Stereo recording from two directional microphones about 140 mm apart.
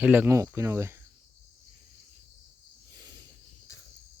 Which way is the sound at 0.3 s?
20° right (ahead or behind).